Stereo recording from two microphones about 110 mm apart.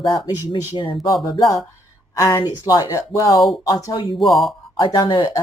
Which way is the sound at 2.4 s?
35° left (ahead or behind).